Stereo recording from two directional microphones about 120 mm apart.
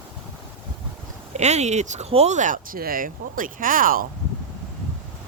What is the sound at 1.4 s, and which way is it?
Speech, 70° right (ahead or behind).